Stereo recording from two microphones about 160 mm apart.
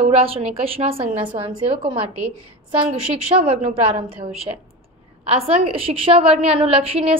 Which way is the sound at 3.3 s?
30° right (ahead or behind).